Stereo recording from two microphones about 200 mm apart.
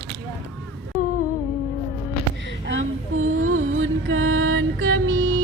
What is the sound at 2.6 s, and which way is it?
Music, 80° right.